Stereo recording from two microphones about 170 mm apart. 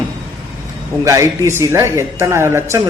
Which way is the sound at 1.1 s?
20° right (ahead or behind).